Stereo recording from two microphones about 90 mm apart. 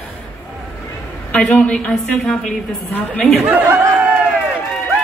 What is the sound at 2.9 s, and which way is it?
Speech, 20° left (ahead or behind).